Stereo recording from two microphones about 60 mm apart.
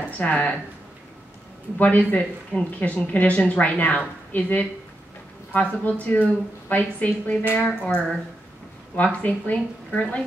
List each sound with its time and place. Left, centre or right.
0.2 s a woman's voice: left
1.8 s a woman's voice: left